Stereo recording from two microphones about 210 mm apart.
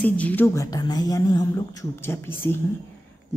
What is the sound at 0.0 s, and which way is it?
A woman's voice, 5° left (ahead or behind).